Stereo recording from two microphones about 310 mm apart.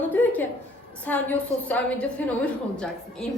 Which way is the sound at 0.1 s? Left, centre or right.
Centre.